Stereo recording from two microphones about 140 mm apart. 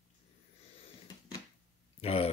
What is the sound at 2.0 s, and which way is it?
Speech, 45° left (ahead or behind).